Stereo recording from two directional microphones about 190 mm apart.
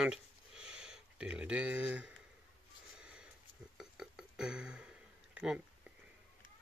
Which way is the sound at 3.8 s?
Centre (ahead or behind).